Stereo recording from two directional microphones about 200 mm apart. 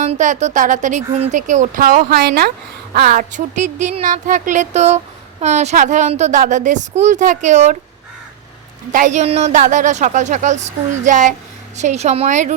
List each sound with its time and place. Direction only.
0.0 s a woman's voice: 40° right (ahead or behind)
8.9 s a woman's voice: 40° right (ahead or behind)